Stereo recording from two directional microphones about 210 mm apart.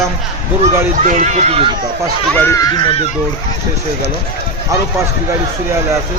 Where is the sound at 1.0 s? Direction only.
35° right (ahead or behind).